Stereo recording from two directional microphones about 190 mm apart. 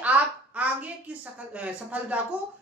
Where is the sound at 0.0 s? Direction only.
5° right (ahead or behind).